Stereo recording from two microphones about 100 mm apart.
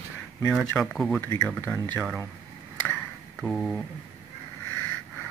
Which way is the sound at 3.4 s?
Centre (ahead or behind).